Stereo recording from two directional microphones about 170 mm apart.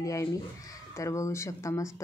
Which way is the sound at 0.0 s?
20° left (ahead or behind).